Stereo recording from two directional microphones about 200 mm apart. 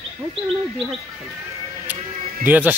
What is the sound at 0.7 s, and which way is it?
Speech, centre (ahead or behind).